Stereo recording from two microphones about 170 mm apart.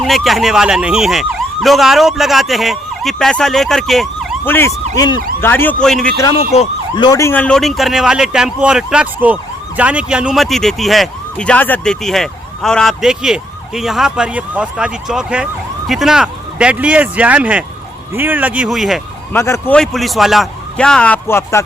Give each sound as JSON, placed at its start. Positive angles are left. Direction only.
{"t": 0.0, "sound": "speech", "side_deg": 0}
{"t": 4.4, "sound": "speech", "side_deg": 10}
{"t": 4.9, "sound": "emergency vehicle", "side_deg": 25}
{"t": 5.4, "sound": "speech", "side_deg": 15}
{"t": 6.3, "sound": "emergency vehicle", "side_deg": 35}
{"t": 6.9, "sound": "speech", "side_deg": 25}
{"t": 19.3, "sound": "speech", "side_deg": 15}
{"t": 19.7, "sound": "speech", "side_deg": 0}